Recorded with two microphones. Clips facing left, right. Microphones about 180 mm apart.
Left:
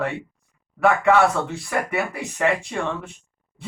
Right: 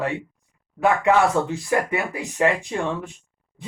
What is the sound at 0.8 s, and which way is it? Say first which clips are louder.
Speech: left 1 dB; 15° right (ahead or behind).